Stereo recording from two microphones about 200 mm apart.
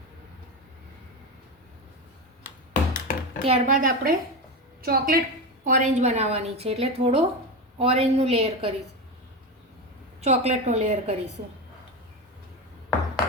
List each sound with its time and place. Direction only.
2.9 s a sound: 45° left (ahead or behind)
3.4 s a woman's voice: 30° right (ahead or behind)
3.8 s a woman's voice: 45° right (ahead or behind)
5.6 s a woman's voice: 40° right (ahead or behind)
10.2 s a woman's voice: 30° right (ahead or behind)